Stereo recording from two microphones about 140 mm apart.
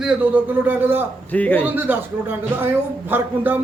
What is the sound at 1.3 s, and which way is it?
Speech, 10° left (ahead or behind).